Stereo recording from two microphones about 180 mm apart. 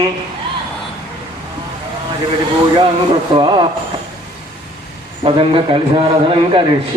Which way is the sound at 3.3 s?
25° right (ahead or behind).